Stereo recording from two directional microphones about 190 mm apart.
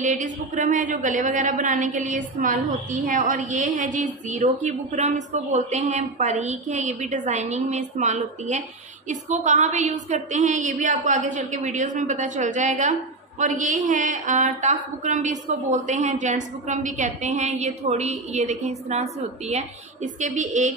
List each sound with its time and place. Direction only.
0.0 s a woman's voice: 40° right (ahead or behind)